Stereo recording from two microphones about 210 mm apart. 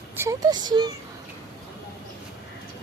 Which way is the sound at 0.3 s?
20° right (ahead or behind).